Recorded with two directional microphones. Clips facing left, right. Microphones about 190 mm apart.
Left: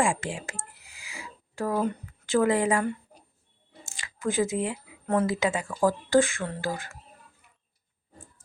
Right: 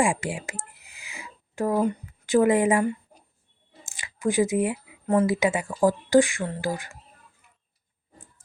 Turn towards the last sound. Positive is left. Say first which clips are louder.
# right 3 dB
turn(degrees=-15)  # may be behind; listen again after turning